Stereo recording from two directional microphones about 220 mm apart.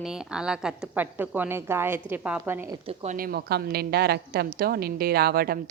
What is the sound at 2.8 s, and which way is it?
A woman's voice, 35° right (ahead or behind).